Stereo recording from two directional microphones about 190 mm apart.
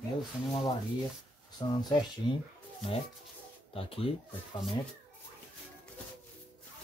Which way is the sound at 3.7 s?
30° left (ahead or behind).